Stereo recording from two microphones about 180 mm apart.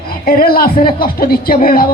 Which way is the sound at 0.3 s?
55° left (ahead or behind).